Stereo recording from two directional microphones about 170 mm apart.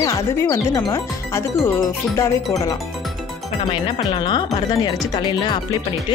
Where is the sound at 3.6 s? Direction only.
30° left (ahead or behind).